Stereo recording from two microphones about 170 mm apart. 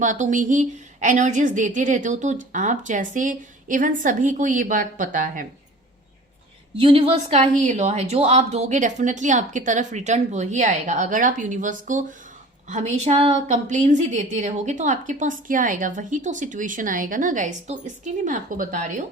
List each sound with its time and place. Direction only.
0.0 s a woman's voice: 50° right (ahead or behind)
6.7 s a woman's voice: 35° right (ahead or behind); by 19.0 s 50° right (ahead or behind)